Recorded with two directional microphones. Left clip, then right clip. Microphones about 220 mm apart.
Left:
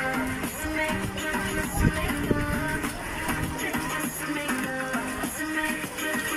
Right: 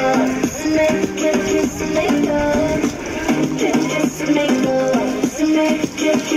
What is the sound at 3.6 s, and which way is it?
Music, 40° right (ahead or behind).